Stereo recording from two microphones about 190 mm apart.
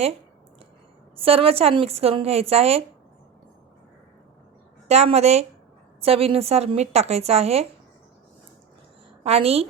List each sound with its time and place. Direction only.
1.1 s a woman's voice: 30° right (ahead or behind)
4.9 s a woman's voice: 35° right (ahead or behind)
9.2 s a woman's voice: 30° right (ahead or behind)